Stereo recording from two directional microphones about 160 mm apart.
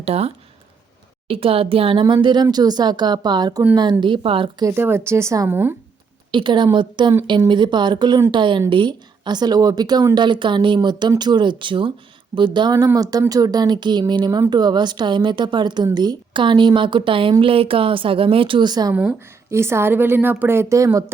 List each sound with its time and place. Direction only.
0.0 s a woman's voice: 40° right (ahead or behind)
4.6 s a woman's voice: 15° right (ahead or behind)
6.3 s a woman's voice: 30° right (ahead or behind)